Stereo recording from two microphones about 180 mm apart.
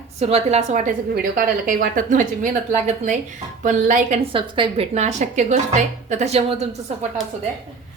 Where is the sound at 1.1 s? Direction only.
55° right (ahead or behind).